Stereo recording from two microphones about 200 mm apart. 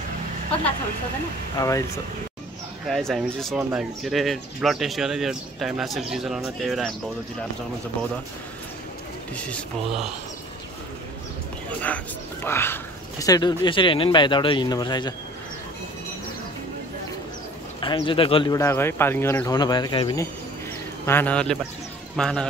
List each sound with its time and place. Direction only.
1.6 s speech: 15° left (ahead or behind)
2.9 s speech: centre (ahead or behind)
9.4 s speech: 5° left (ahead or behind)
12.4 s speech: 10° left (ahead or behind)
17.7 s speech: 25° left (ahead or behind)
21.0 s speech: 10° left (ahead or behind)